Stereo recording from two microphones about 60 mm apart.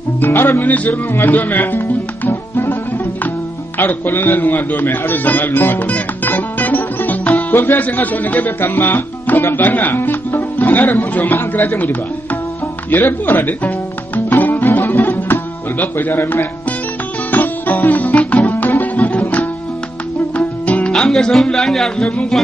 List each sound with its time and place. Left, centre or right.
0.2 s a man's voice: left
2.2 s music: left
3.7 s a man's voice: left
5.9 s music: left
20.9 s speech: centre